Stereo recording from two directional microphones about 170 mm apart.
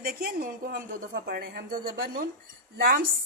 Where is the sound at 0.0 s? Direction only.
60° right (ahead or behind).